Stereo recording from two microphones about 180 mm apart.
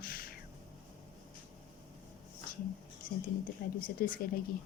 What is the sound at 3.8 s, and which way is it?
Speech, 50° left (ahead or behind).